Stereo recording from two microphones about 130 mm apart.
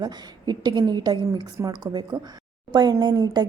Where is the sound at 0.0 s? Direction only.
30° right (ahead or behind).